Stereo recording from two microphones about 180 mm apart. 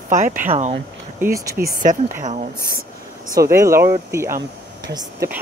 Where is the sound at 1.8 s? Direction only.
45° right (ahead or behind).